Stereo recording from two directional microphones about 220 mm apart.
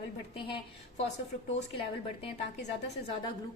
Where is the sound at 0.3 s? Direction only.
25° left (ahead or behind).